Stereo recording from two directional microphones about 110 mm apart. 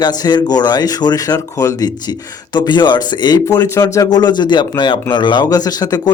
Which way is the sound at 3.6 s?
25° left (ahead or behind).